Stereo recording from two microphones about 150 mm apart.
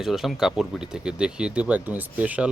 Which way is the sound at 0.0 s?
Centre (ahead or behind).